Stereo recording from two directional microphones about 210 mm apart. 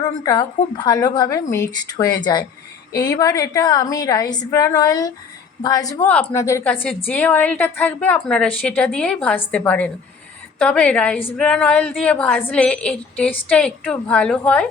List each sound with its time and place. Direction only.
0.0 s a woman's voice: 15° left (ahead or behind)